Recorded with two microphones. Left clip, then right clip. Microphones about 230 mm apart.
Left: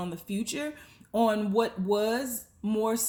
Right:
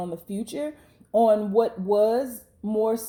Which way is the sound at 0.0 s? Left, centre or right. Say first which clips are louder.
Right 3 dB; left.